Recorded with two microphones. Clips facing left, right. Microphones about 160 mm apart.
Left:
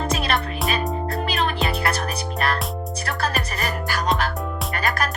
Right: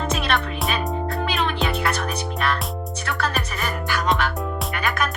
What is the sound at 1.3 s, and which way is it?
Music, 40° left (ahead or behind).